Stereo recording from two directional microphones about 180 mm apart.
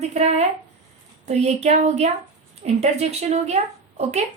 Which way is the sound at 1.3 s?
35° right (ahead or behind).